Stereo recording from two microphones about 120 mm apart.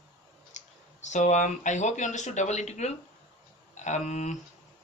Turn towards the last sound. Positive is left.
turn(degrees=85)